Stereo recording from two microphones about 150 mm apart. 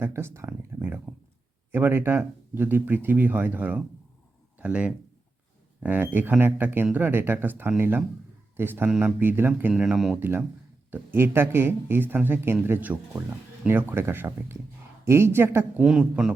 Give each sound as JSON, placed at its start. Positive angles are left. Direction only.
{"t": 0.0, "sound": "speech", "side_deg": -15}
{"t": 10.2, "sound": "speech", "side_deg": -15}
{"t": 15.9, "sound": "speech", "side_deg": -5}